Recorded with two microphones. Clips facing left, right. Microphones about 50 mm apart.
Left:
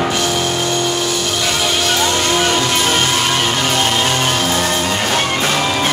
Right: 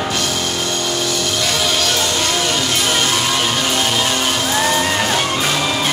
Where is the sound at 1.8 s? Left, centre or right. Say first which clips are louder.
Left 3 dB; left.